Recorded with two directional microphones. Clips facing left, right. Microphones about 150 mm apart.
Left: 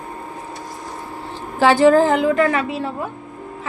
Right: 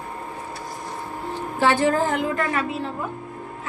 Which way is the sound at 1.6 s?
90° left.